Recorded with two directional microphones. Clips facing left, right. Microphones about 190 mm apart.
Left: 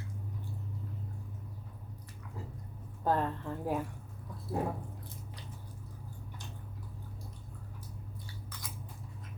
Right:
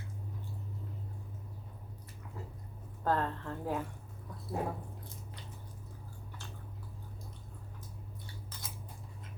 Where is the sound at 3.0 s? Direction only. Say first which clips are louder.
Left 1 dB; 15° left (ahead or behind).